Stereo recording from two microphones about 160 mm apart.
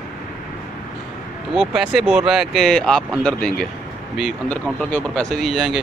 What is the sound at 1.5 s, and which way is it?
Speech, 5° right (ahead or behind).